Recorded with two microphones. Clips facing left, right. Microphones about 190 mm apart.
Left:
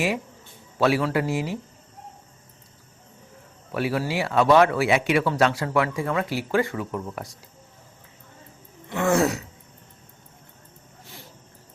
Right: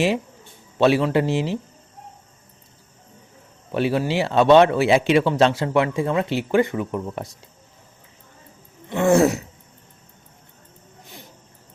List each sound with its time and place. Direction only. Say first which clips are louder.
0.8 s a man's voice: right 4 dB; 25° right (ahead or behind)
3.7 s a man's voice: right 4 dB; 25° right (ahead or behind)
8.9 s a man's voice: right 5 dB; 25° right (ahead or behind)
11.0 s a sound: right 2 dB; 20° right (ahead or behind)